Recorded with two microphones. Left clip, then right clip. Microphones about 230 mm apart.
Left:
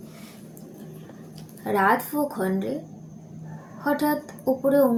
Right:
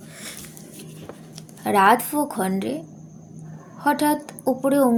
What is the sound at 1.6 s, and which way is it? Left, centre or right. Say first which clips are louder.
Speech: right 5 dB; right.